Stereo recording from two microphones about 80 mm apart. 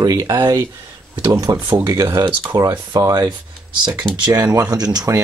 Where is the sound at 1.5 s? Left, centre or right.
Right.